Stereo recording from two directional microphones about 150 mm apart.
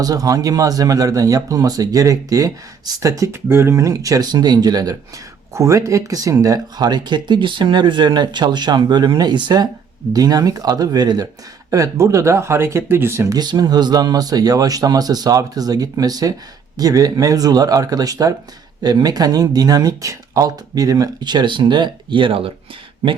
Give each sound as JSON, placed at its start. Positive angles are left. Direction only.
{"t": 0.0, "sound": "speech", "side_deg": -25}